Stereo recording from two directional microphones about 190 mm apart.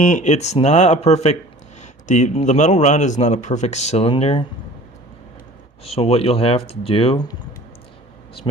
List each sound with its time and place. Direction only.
0.1 s a man's voice: 40° left (ahead or behind)
5.8 s a man's voice: 30° left (ahead or behind)